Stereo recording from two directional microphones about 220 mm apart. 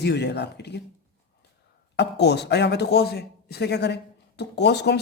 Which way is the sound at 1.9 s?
50° left (ahead or behind).